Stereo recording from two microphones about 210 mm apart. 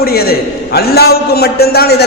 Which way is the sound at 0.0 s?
45° left (ahead or behind).